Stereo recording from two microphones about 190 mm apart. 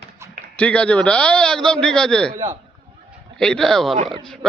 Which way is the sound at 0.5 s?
5° left (ahead or behind).